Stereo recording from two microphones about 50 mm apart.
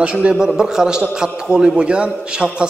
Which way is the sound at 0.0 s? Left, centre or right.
Right.